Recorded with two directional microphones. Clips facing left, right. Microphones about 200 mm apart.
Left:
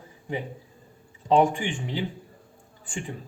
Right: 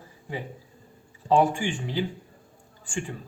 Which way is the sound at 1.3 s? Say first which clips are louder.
Left 1 dB; 20° left (ahead or behind).